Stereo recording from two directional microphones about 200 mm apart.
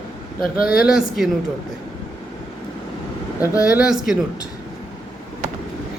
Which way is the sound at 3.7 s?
5° right (ahead or behind).